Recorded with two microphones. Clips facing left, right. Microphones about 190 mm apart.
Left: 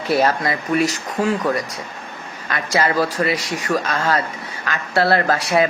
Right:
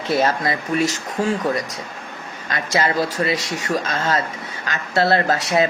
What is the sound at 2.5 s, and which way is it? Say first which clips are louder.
Speech: left 1 dB; 25° right (ahead or behind).